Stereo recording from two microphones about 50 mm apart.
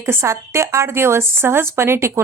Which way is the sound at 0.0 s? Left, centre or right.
Right.